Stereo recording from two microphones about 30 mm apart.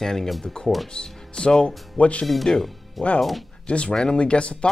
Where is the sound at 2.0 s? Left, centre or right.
Left.